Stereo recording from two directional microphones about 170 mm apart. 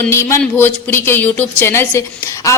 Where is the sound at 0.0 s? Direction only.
15° left (ahead or behind).